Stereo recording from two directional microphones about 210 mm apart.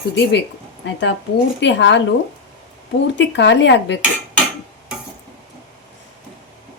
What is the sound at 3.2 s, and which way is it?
Speech, 60° left (ahead or behind).